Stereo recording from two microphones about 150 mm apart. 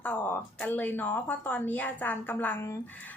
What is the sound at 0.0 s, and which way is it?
Speech, 10° left (ahead or behind).